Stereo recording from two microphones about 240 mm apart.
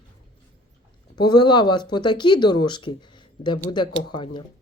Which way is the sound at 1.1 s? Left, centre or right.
Centre.